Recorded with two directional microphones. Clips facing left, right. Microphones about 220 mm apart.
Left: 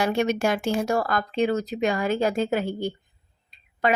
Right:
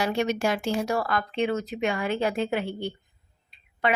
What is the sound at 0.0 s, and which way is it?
Speech, 50° left (ahead or behind).